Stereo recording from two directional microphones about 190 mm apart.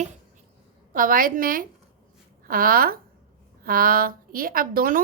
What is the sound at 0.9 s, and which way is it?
A woman's voice, 45° right (ahead or behind).